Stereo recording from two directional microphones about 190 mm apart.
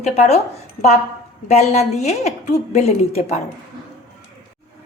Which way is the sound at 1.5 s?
35° left (ahead or behind).